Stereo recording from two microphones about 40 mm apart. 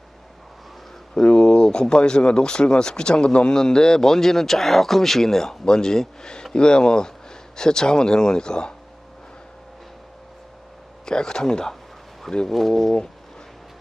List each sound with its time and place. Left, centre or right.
1.1 s speech: centre
11.0 s speech: centre